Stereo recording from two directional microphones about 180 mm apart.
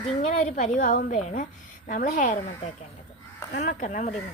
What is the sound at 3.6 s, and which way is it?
Speech, 45° left (ahead or behind).